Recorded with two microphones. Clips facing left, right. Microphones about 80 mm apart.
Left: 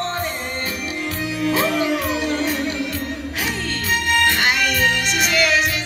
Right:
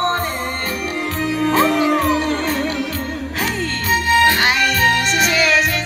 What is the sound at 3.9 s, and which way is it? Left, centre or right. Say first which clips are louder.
Music: right 4 dB; centre.